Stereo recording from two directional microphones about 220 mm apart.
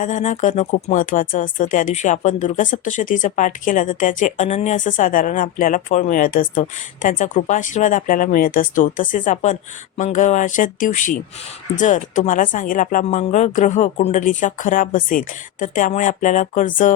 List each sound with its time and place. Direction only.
0.0 s speech: 35° left (ahead or behind)